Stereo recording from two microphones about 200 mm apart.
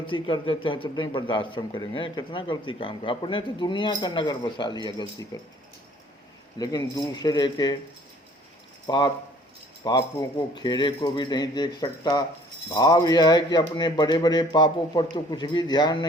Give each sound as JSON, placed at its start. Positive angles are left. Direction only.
{"t": 0.0, "sound": "a man's voice", "side_deg": 25}
{"t": 6.6, "sound": "a man's voice", "side_deg": 20}
{"t": 8.9, "sound": "a man's voice", "side_deg": 20}